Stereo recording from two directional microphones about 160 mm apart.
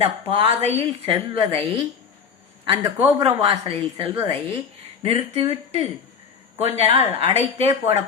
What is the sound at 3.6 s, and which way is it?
A woman's voice, 35° right (ahead or behind).